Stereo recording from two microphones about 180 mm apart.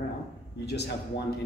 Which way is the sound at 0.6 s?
65° left (ahead or behind).